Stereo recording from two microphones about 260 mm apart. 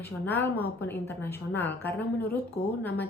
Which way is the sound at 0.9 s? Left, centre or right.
Centre.